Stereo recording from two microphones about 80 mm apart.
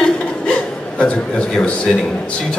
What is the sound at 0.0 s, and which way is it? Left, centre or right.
Chuckle, centre.